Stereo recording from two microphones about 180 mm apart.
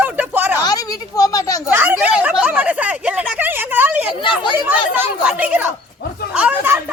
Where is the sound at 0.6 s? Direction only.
20° left (ahead or behind).